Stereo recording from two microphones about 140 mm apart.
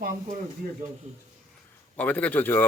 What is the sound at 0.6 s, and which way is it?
Speech, 90° right.